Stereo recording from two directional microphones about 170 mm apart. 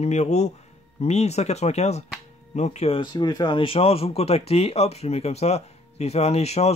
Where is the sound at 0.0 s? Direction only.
40° left (ahead or behind).